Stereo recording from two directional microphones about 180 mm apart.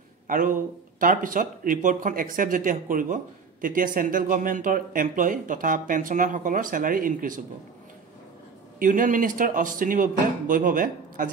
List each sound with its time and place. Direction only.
0.3 s speech: 50° right (ahead or behind)
8.7 s speech: 45° right (ahead or behind)